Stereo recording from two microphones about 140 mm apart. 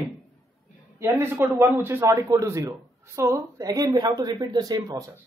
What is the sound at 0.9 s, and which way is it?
A man's voice, 15° right (ahead or behind).